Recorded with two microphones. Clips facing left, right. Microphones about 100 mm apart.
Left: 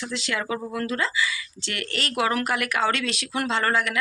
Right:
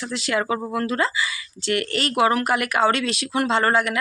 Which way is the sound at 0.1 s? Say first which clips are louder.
Right 6 dB; 45° right (ahead or behind).